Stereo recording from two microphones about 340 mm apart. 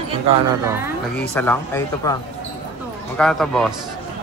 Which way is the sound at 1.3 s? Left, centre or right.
Centre.